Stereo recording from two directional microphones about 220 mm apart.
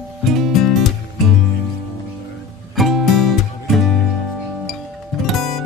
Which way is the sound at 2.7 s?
Centre (ahead or behind).